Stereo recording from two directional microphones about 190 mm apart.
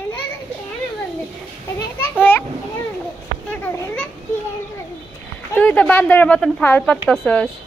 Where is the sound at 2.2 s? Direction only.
10° left (ahead or behind).